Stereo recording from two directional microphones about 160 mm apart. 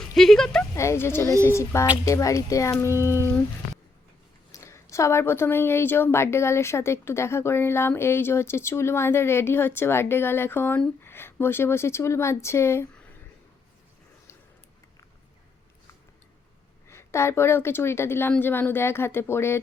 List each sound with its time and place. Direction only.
0.0 s speech: centre (ahead or behind)
0.8 s a woman's voice: 15° left (ahead or behind)
4.5 s a woman's voice: 20° left (ahead or behind)
16.9 s a woman's voice: 15° left (ahead or behind)